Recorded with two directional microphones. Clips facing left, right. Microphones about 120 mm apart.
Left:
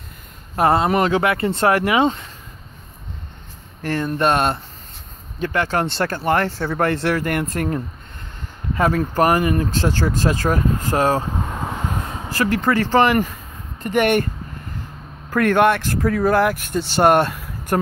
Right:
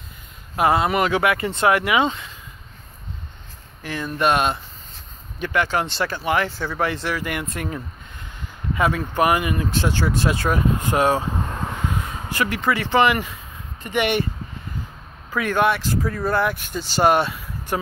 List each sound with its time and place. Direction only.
0.6 s speech: 35° left (ahead or behind)
3.8 s speech: 55° left (ahead or behind)
4.2 s speech: 35° left (ahead or behind)
6.5 s speech: 60° left (ahead or behind); by 11.2 s 40° left (ahead or behind)
11.3 s vehicle: 10° left (ahead or behind)
12.3 s speech: 35° left (ahead or behind)
15.3 s speech: 60° left (ahead or behind)